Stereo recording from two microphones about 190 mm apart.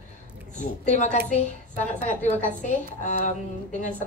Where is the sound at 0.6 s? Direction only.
40° left (ahead or behind).